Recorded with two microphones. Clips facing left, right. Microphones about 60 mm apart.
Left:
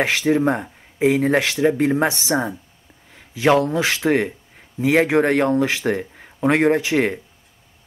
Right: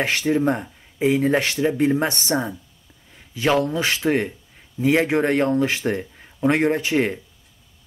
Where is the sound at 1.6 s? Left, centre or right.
Left.